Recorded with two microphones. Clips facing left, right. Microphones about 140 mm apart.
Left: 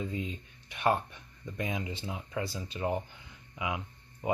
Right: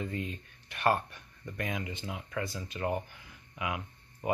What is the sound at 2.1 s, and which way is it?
Speech, 25° left (ahead or behind).